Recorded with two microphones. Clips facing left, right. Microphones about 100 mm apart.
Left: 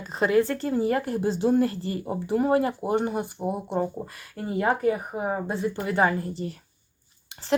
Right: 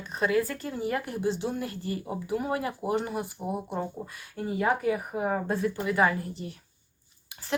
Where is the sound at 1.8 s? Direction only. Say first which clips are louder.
Left 3 dB; 30° left (ahead or behind).